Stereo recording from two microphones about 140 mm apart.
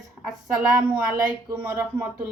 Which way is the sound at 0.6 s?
10° right (ahead or behind).